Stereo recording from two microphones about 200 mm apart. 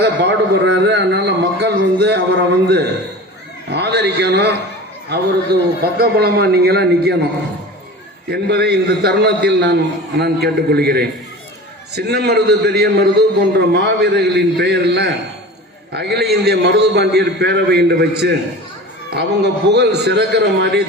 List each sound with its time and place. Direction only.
0.0 s a man's voice: 60° right (ahead or behind)
5.8 s a man's voice: 50° right (ahead or behind)
8.3 s a man's voice: 55° right (ahead or behind)